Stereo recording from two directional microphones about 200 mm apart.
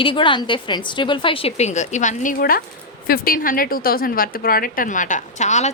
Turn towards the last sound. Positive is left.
turn(degrees=35)  # may be behind; listen again after turning